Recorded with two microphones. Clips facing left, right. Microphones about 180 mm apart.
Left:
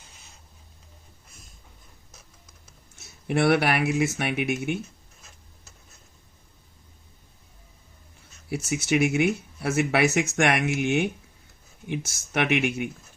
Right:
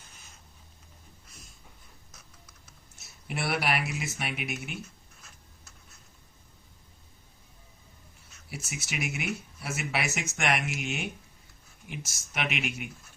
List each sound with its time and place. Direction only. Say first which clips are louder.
3.2 s speech: left 9 dB; 60° left (ahead or behind)
8.4 s speech: left 14 dB; 60° left (ahead or behind)